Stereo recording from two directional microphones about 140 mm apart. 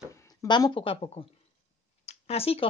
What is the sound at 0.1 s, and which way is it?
Speech, 20° left (ahead or behind).